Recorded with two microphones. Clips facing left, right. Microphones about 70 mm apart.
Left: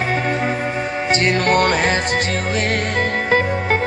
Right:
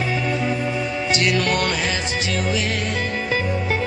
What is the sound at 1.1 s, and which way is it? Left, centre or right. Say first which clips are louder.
Music: left 4 dB; left.